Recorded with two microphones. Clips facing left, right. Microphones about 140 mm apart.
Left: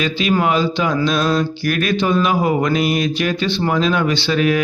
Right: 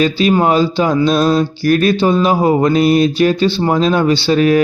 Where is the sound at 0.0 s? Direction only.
35° right (ahead or behind).